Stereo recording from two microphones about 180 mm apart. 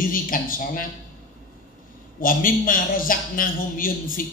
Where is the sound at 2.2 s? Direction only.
50° left (ahead or behind).